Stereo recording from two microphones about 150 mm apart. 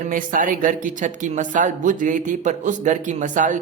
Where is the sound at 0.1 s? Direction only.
65° right (ahead or behind).